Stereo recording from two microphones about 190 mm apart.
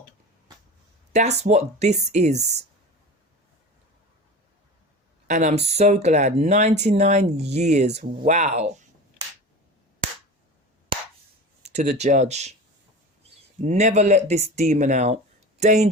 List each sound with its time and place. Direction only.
1.1 s speech: 35° right (ahead or behind)
5.3 s speech: 40° right (ahead or behind)
11.6 s a sound: 35° right (ahead or behind)
11.9 s speech: 35° right (ahead or behind)